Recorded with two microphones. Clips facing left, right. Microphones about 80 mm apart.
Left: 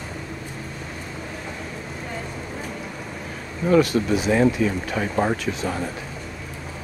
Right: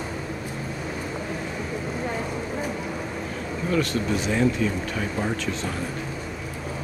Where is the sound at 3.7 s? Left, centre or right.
Centre.